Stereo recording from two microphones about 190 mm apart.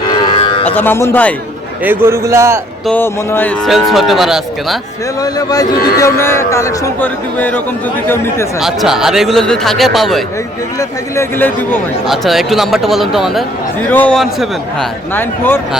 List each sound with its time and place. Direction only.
0.1 s cattle: 25° left (ahead or behind)
0.6 s a man's voice: 10° left (ahead or behind)
1.8 s a man's voice: 10° right (ahead or behind)
2.8 s a man's voice: 10° left (ahead or behind)
3.7 s speech: centre (ahead or behind)
5.2 s a man's voice: 20° left (ahead or behind)
8.6 s speech: centre (ahead or behind)
10.8 s a man's voice: 10° left (ahead or behind)
12.0 s a man's voice: centre (ahead or behind)